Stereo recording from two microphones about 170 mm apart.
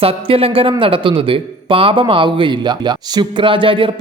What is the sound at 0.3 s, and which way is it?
A man's voice, 35° right (ahead or behind).